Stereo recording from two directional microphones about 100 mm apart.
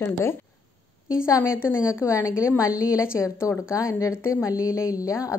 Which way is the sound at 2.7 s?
10° right (ahead or behind).